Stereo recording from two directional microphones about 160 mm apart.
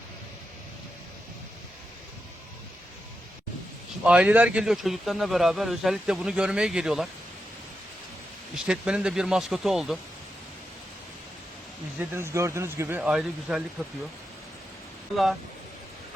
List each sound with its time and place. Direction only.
4.0 s speech: 5° right (ahead or behind)
8.5 s speech: 5° right (ahead or behind)
11.9 s speech: 15° right (ahead or behind)
13.0 s speech: 5° right (ahead or behind)
15.1 s speech: centre (ahead or behind)